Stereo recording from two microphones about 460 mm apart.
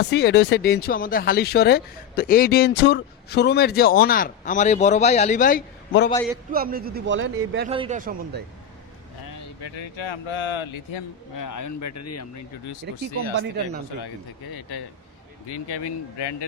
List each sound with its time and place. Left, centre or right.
0.0 s speech: left
6.5 s a man's voice: centre
9.6 s speech: left
11.3 s speech: left
12.8 s speech: right
15.4 s speech: left